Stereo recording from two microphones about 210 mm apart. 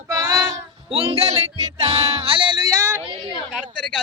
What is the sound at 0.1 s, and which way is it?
Child singing, 20° right (ahead or behind).